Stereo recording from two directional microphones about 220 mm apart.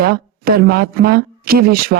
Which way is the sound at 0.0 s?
45° right (ahead or behind).